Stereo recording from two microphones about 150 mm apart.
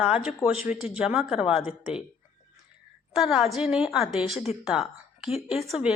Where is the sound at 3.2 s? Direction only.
Centre (ahead or behind).